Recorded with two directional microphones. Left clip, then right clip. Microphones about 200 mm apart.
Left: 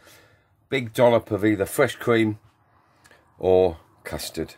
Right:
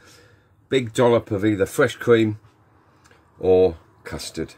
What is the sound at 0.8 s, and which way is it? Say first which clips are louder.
Speech: right 1 dB; 35° left (ahead or behind).